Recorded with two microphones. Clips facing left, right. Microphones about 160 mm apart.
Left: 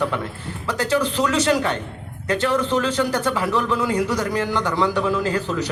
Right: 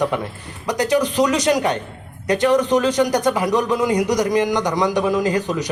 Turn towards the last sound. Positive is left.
turn(degrees=-15)  # may be behind; listen again after turning